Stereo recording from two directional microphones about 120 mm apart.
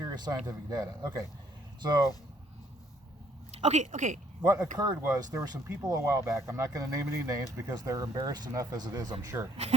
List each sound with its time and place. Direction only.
0.0 s speech: 35° right (ahead or behind)
3.5 s speech: 70° right (ahead or behind); by 4.2 s 90° right
4.4 s speech: 25° right (ahead or behind)